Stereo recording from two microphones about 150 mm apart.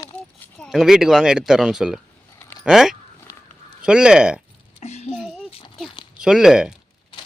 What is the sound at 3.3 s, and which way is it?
Honk, 15° left (ahead or behind).